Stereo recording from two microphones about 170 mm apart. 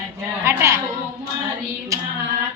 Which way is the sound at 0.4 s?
15° right (ahead or behind).